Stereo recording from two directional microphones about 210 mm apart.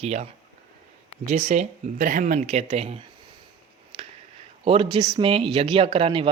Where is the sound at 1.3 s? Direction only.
30° right (ahead or behind).